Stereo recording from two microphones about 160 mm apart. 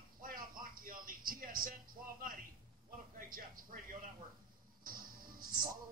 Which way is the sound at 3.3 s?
60° right (ahead or behind).